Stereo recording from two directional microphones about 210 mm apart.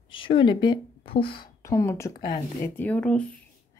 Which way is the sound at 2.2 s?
40° left (ahead or behind).